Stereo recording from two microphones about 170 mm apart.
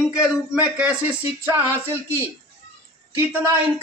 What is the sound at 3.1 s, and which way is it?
Speech, 15° right (ahead or behind).